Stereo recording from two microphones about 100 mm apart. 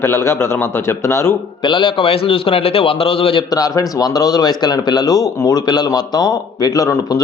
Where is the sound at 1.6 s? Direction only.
55° left (ahead or behind).